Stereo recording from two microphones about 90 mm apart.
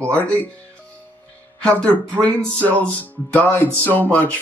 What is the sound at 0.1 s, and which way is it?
Speech, 15° left (ahead or behind).